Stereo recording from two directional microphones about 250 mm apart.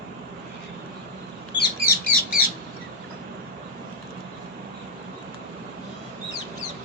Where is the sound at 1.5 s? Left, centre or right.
Left.